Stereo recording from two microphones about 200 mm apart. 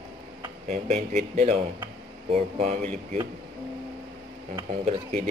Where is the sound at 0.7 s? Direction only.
35° right (ahead or behind).